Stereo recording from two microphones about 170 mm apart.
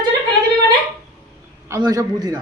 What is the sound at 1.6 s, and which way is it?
Speech, 20° right (ahead or behind).